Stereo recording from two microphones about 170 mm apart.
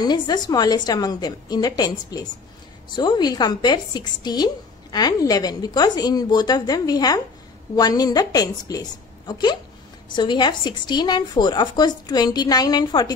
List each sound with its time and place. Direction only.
0.0 s a woman's voice: 25° left (ahead or behind)